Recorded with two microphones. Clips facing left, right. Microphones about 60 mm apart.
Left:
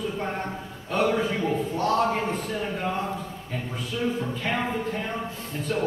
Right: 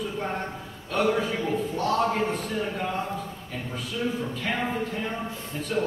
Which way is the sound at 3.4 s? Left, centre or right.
Centre.